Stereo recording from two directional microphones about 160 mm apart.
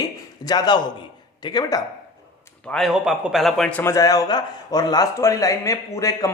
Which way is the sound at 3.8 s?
20° left (ahead or behind).